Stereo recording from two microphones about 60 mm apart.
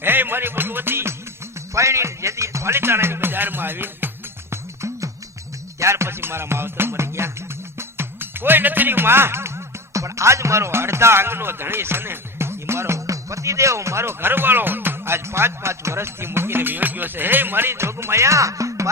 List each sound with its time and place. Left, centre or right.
0.0 s music: right
1.7 s music: right
4.5 s music: right
9.9 s speech: right